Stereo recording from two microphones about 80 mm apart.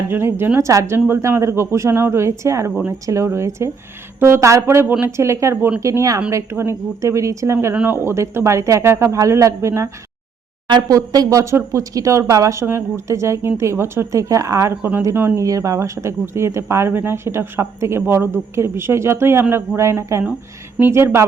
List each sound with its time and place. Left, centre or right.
0.1 s a woman's voice: right
0.6 s speech: right
0.9 s speech: right
7.7 s speech: right
10.8 s speech: right
14.8 s a woman's voice: right
15.0 s speech: right